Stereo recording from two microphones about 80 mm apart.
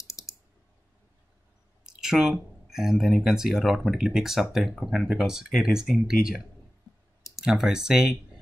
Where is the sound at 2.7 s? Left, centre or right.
Centre.